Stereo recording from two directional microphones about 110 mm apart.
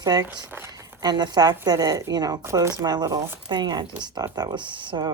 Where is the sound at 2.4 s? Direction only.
25° right (ahead or behind).